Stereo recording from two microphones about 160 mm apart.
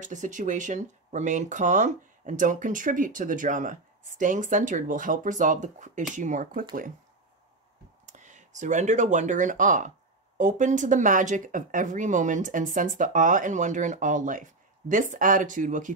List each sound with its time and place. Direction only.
0.0 s speech: 50° right (ahead or behind)
8.1 s speech: 50° right (ahead or behind)